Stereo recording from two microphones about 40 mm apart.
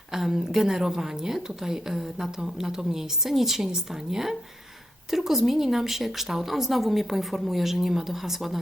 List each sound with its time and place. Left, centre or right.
0.1 s a woman's voice: centre